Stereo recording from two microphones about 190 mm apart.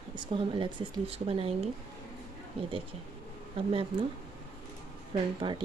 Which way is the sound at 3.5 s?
30° right (ahead or behind).